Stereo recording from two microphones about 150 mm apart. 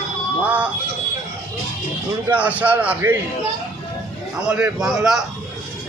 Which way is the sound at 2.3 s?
10° right (ahead or behind).